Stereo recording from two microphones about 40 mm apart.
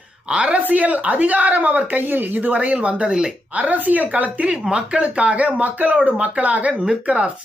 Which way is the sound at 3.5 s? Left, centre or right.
Right.